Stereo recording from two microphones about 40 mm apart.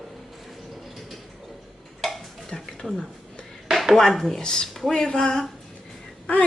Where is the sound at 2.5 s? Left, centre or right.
Centre.